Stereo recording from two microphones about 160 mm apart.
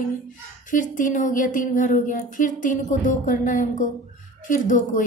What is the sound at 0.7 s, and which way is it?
A woman's voice, 55° left (ahead or behind).